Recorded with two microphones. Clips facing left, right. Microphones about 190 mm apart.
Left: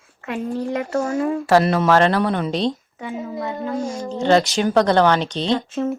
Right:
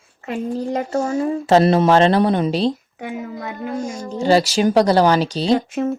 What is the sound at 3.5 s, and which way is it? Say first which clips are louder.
Speech: left 1 dB; 20° right (ahead or behind).